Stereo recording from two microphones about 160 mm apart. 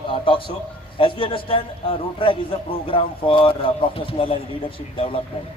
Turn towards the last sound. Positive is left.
turn(degrees=35)  # may be behind; listen again after turning